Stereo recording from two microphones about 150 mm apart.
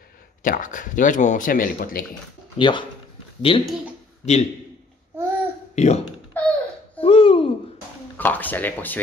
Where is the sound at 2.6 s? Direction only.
30° left (ahead or behind).